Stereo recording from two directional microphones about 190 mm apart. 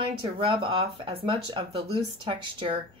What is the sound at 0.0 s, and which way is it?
Speech, 25° right (ahead or behind).